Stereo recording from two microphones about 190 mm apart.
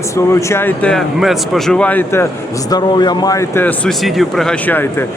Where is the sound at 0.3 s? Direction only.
15° left (ahead or behind).